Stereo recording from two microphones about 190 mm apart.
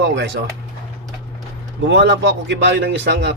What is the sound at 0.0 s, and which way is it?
Speech, 60° right (ahead or behind).